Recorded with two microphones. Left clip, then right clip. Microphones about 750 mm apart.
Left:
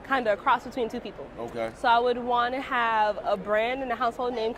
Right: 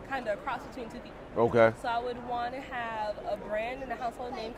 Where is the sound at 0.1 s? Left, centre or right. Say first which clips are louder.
Left 10 dB; left.